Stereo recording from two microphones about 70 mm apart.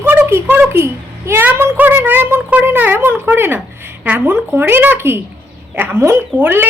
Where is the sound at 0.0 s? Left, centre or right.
Right.